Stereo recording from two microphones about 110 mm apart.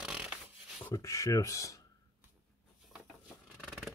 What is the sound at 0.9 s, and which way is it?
Speech, 30° left (ahead or behind).